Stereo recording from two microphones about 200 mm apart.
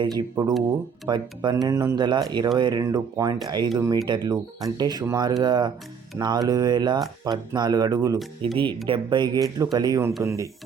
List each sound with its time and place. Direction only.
0.0 s speech: 20° right (ahead or behind)